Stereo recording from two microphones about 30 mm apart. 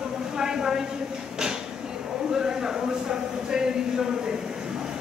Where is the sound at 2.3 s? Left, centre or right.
Right.